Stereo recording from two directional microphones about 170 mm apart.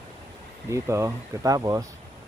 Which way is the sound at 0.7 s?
15° right (ahead or behind).